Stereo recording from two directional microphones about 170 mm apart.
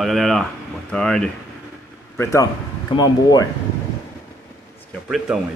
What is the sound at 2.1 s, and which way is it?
A man's voice, 15° left (ahead or behind).